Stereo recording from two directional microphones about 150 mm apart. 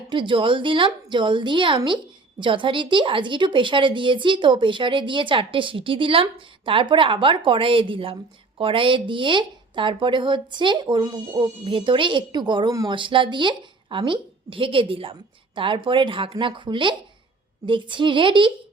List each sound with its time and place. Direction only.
0.1 s a woman's voice: 35° right (ahead or behind)
11.6 s a woman's voice: 35° right (ahead or behind)